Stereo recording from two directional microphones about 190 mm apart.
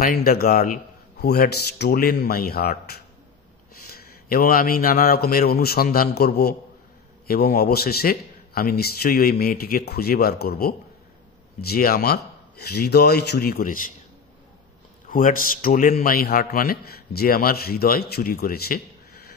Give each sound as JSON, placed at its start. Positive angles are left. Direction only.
{"t": 0.0, "sound": "a man's voice", "side_deg": 50}
{"t": 15.0, "sound": "a man's voice", "side_deg": 45}